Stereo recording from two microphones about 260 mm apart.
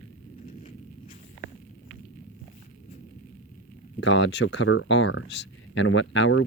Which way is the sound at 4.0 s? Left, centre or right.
Left.